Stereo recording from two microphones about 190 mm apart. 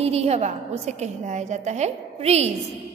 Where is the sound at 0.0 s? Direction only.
35° right (ahead or behind).